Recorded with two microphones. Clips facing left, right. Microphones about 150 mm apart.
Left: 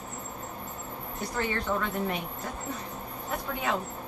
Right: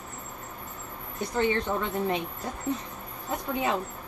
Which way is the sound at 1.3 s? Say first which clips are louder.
Right 4 dB; 20° right (ahead or behind).